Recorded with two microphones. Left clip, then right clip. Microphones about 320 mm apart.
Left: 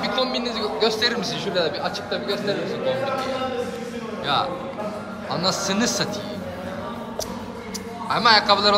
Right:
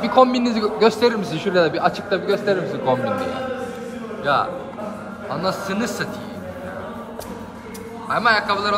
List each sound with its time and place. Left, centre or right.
0.0 s a woman's voice: centre
4.2 s a man's voice: centre
8.1 s a man's voice: centre